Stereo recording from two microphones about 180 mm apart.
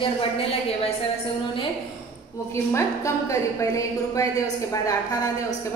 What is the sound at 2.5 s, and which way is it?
A woman's voice, 15° left (ahead or behind).